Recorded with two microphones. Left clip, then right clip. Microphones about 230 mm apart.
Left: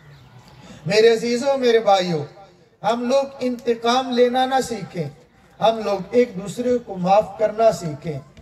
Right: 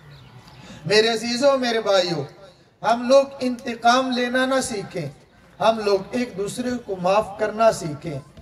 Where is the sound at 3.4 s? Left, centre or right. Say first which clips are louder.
Right 1 dB; right.